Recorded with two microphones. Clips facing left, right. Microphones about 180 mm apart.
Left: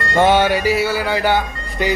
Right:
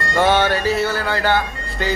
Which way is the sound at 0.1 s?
15° left (ahead or behind).